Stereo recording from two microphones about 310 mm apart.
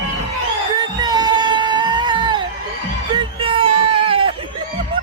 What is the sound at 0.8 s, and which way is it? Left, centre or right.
Music, centre.